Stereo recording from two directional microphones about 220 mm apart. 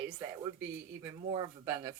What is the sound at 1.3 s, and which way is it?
Speech, 20° right (ahead or behind).